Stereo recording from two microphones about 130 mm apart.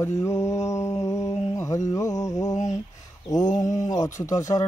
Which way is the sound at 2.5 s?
65° left (ahead or behind).